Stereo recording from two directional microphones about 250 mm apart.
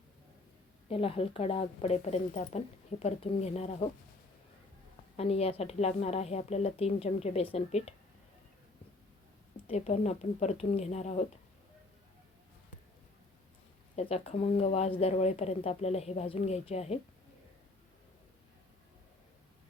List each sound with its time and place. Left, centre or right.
0.9 s speech: left
5.1 s speech: left
9.6 s speech: left
13.9 s speech: left